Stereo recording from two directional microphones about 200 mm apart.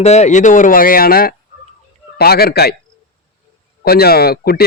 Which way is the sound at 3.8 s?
50° left (ahead or behind).